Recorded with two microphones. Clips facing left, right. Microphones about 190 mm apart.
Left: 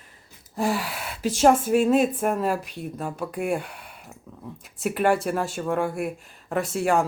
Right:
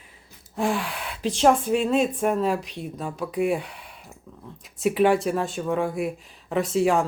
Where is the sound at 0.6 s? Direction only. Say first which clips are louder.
Even; 5° left (ahead or behind).